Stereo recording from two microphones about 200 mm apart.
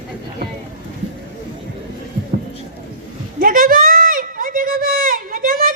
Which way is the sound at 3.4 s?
45° right (ahead or behind).